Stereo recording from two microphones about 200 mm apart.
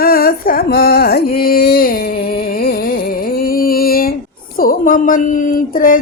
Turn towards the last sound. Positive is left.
turn(degrees=45)  # may be behind; listen again after turning